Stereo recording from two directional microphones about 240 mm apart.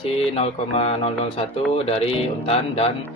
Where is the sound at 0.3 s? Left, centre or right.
Left.